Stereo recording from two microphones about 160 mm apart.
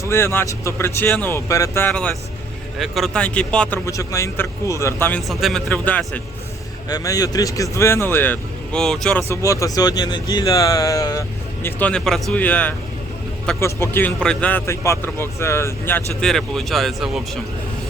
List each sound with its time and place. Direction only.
0.0 s speech: 15° left (ahead or behind)
1.9 s speech: 5° left (ahead or behind)
3.8 s speech: 20° left (ahead or behind)
5.3 s speech: centre (ahead or behind)
6.8 s speech: 25° left (ahead or behind); by 9.2 s 5° left (ahead or behind)
9.3 s speech: 20° left (ahead or behind)
11.6 s speech: 10° left (ahead or behind)
16.2 s speech: centre (ahead or behind)